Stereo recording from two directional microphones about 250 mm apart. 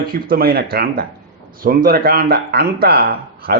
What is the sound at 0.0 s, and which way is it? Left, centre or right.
A man's voice, right.